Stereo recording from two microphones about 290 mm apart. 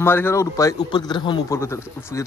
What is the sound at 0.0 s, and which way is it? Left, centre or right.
Speech, centre.